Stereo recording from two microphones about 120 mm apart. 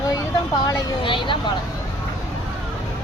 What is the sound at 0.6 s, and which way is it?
Speech, 40° left (ahead or behind).